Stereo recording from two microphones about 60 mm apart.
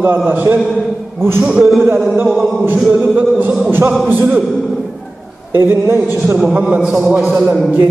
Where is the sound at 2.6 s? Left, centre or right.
Right.